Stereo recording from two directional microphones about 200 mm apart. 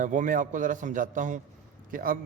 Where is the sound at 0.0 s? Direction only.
40° right (ahead or behind).